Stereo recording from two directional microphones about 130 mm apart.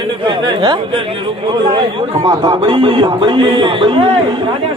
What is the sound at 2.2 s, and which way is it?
Speech, 35° right (ahead or behind).